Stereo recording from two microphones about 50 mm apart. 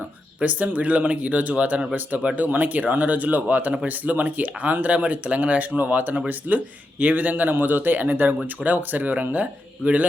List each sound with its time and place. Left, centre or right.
0.4 s speech: right